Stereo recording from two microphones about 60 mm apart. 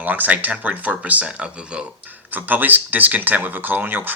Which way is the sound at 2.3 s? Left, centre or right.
Right.